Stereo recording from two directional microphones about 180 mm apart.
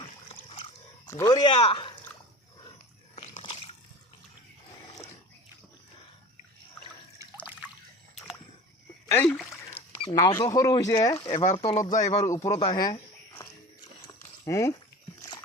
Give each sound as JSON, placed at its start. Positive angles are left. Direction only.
{"t": 0.0, "sound": "dog", "side_deg": 35}
{"t": 1.0, "sound": "speech", "side_deg": 20}
{"t": 3.2, "sound": "splash", "side_deg": 30}
{"t": 9.0, "sound": "a sound", "side_deg": 10}
{"t": 10.2, "sound": "speech", "side_deg": 20}
{"t": 11.3, "sound": "speech", "side_deg": 30}
{"t": 12.2, "sound": "speech", "side_deg": 15}
{"t": 12.5, "sound": "a sound", "side_deg": 30}